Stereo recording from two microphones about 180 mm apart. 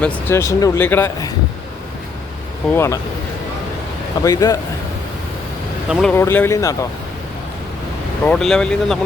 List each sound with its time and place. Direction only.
0.0 s speech: 10° left (ahead or behind)
2.7 s speech: 15° left (ahead or behind)
4.2 s speech: 20° left (ahead or behind)
5.9 s speech: centre (ahead or behind)
6.1 s speech: 15° left (ahead or behind)
8.2 s speech: 5° left (ahead or behind)